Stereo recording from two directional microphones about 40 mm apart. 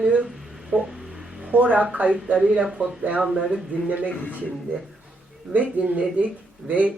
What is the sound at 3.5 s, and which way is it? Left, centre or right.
Speech, right.